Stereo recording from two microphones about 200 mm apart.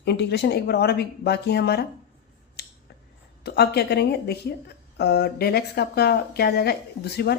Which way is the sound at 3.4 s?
55° left (ahead or behind).